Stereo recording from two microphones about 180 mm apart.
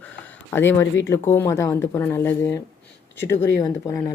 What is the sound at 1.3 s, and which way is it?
Speech, 15° left (ahead or behind).